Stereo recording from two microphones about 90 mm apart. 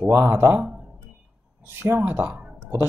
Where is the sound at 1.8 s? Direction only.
25° right (ahead or behind).